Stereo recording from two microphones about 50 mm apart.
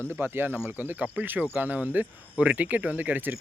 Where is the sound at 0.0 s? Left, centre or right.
Right.